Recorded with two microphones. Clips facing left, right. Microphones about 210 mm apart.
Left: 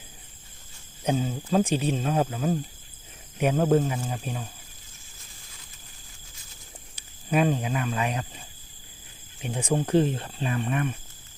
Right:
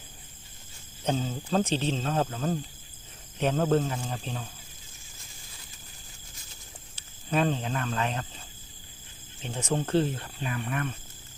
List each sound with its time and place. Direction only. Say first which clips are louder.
1.0 s speech: left 3 dB; 10° left (ahead or behind)
7.3 s speech: left 3 dB; 10° left (ahead or behind); by 10.8 s 30° left (ahead or behind)